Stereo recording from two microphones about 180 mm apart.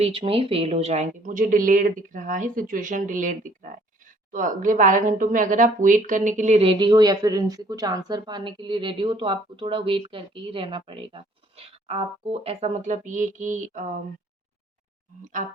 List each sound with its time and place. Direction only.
0.0 s speech: 30° right (ahead or behind)